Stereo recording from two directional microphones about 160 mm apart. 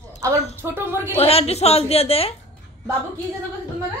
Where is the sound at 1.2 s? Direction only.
40° left (ahead or behind).